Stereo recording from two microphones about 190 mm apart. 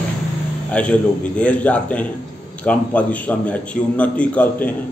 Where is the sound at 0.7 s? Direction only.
5° left (ahead or behind).